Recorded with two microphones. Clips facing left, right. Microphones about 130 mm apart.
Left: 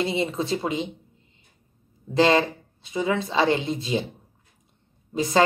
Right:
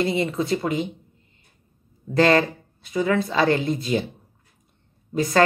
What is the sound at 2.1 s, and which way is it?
Speech, 20° left (ahead or behind).